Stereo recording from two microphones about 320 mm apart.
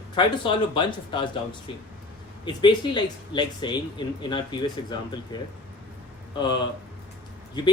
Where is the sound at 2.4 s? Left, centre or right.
Centre.